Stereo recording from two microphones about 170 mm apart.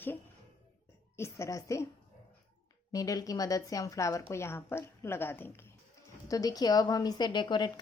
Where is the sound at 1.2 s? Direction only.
15° left (ahead or behind).